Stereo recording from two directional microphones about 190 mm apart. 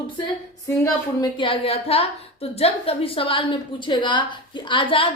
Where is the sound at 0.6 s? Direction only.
15° left (ahead or behind).